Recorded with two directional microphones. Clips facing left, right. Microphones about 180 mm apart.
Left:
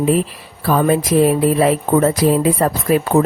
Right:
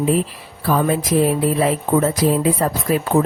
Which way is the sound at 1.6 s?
70° left (ahead or behind).